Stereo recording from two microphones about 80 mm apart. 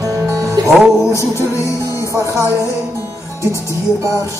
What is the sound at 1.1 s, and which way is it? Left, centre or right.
Music, left.